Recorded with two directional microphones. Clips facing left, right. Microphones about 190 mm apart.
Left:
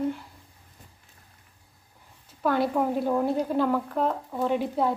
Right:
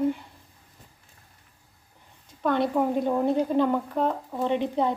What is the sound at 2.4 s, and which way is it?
A woman's voice, 5° left (ahead or behind).